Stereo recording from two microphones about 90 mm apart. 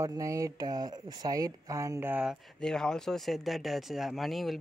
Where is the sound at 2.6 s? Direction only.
5° left (ahead or behind).